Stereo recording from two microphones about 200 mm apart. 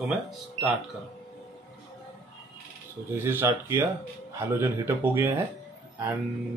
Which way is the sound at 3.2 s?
10° right (ahead or behind).